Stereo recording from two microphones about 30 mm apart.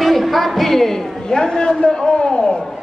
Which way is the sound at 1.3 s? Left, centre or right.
Left.